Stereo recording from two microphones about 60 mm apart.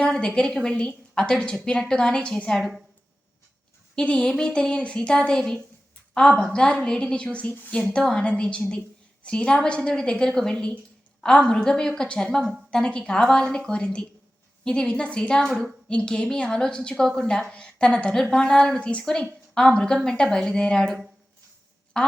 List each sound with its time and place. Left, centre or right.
0.1 s a woman's voice: centre
2.6 s a woman's voice: centre
3.9 s a woman's voice: centre